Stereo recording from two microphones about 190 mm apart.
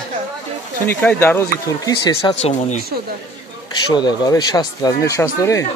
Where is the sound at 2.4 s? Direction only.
35° left (ahead or behind).